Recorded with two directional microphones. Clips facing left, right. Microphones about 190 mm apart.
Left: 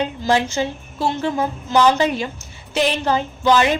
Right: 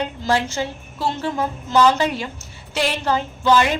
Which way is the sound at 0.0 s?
20° left (ahead or behind).